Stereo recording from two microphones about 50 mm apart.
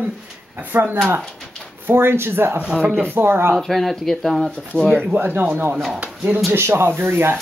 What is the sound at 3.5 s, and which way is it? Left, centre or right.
Speech, centre.